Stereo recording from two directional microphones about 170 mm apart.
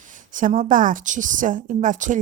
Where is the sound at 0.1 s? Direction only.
50° right (ahead or behind).